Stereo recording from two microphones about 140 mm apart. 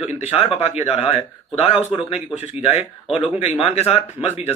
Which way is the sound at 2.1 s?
10° right (ahead or behind).